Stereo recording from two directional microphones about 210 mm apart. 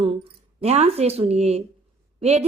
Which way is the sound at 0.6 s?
30° right (ahead or behind).